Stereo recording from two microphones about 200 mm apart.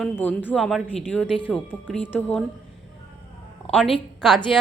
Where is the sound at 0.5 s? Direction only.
5° right (ahead or behind).